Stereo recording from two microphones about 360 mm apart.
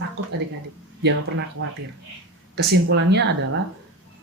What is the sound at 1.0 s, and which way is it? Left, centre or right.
Speech, right.